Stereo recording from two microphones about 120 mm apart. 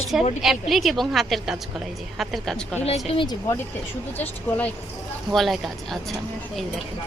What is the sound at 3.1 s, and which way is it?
Speech, 45° left (ahead or behind).